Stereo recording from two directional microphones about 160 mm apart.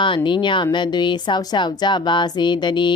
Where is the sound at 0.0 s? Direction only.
30° left (ahead or behind).